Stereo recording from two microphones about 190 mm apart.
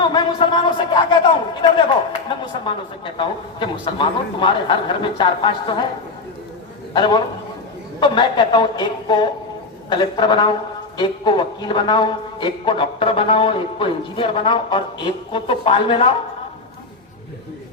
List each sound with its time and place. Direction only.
0.0 s a sound: 25° left (ahead or behind)
2.4 s speech: 25° left (ahead or behind)
6.9 s speech: 25° left (ahead or behind)